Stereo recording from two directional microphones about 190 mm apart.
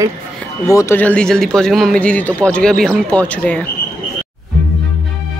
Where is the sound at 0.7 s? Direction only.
10° left (ahead or behind).